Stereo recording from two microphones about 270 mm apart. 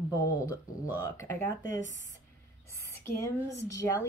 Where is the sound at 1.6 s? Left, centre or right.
Left.